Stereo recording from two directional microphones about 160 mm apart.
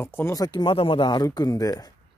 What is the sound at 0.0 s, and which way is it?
Speech, 15° left (ahead or behind).